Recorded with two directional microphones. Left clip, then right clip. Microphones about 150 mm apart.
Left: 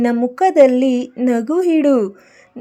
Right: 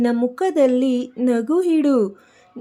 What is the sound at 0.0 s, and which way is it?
Speech, 15° left (ahead or behind).